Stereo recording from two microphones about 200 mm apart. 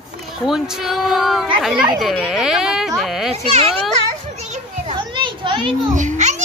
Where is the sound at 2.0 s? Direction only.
Centre (ahead or behind).